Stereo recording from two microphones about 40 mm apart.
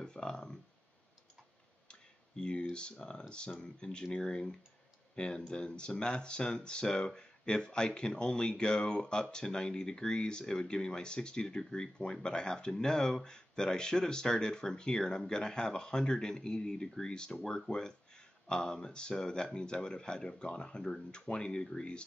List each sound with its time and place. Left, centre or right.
0.0 s speech: centre
1.9 s finger snapping: left
2.7 s speech: left